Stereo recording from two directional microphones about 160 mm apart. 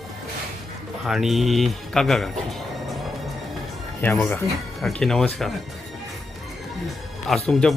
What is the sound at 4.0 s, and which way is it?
Speech, 10° left (ahead or behind).